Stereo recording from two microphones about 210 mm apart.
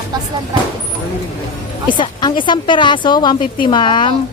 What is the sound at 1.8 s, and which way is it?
Speech, 20° left (ahead or behind).